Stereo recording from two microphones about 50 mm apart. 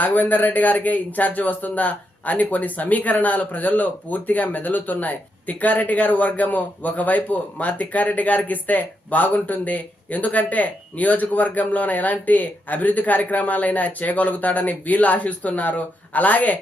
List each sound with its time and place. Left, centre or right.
0.0 s a man's voice: left